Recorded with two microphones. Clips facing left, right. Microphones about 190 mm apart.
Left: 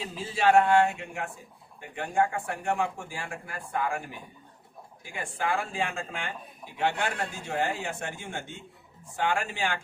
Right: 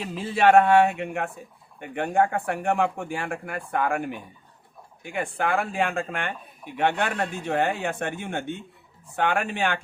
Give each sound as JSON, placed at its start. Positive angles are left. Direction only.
{"t": 0.0, "sound": "speech", "side_deg": -60}